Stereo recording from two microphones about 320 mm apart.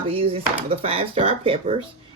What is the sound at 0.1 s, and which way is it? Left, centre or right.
Speech, centre.